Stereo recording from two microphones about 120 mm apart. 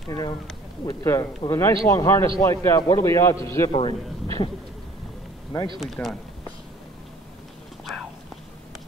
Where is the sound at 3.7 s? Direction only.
45° left (ahead or behind).